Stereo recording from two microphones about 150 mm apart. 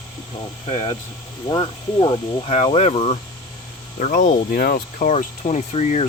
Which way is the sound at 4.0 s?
60° left (ahead or behind).